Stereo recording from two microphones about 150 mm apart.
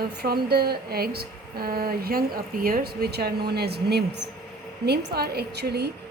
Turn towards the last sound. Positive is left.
turn(degrees=-90)